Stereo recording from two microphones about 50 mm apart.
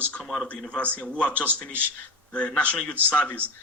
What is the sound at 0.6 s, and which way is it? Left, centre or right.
Speech, left.